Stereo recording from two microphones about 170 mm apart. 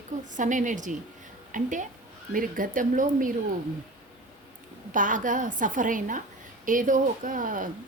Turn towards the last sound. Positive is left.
turn(degrees=-50)  # may be behind; listen again after turning